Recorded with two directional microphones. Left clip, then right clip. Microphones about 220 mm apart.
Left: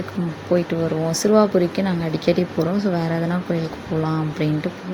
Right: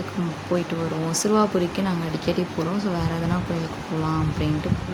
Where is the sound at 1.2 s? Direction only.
15° left (ahead or behind).